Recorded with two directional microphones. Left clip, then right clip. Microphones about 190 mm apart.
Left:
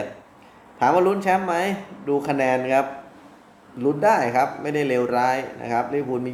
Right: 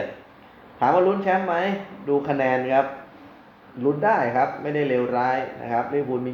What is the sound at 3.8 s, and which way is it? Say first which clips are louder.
Speech: left 2 dB; 20° left (ahead or behind).